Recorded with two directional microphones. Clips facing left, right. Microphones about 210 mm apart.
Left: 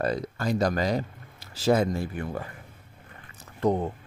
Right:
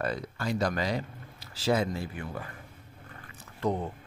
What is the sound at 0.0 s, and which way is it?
Speech, 40° left (ahead or behind).